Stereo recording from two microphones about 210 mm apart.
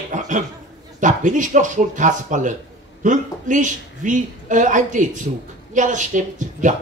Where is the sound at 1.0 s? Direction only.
35° right (ahead or behind).